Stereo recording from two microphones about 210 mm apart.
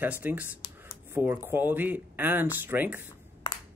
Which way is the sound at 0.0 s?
10° right (ahead or behind).